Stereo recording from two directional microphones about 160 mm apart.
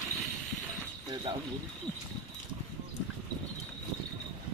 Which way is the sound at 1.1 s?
30° right (ahead or behind).